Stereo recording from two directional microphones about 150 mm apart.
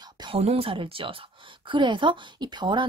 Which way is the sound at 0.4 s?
40° right (ahead or behind).